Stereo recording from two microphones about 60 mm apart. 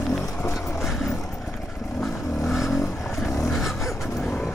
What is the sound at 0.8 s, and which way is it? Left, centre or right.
Vehicle, centre.